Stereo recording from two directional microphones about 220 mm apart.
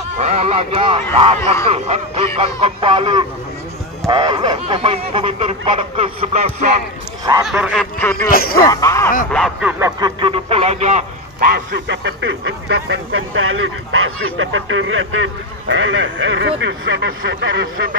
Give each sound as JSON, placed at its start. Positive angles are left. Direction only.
{"t": 0.2, "sound": "speech", "side_deg": -30}
{"t": 7.4, "sound": "honk", "side_deg": 0}
{"t": 8.3, "sound": "speech", "side_deg": 40}
{"t": 8.5, "sound": "speech", "side_deg": 15}
{"t": 9.3, "sound": "honk", "side_deg": 0}
{"t": 9.8, "sound": "speech", "side_deg": -20}
{"t": 11.9, "sound": "speech", "side_deg": -55}